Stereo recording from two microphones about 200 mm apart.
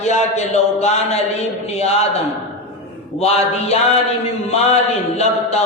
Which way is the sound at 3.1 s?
30° left (ahead or behind).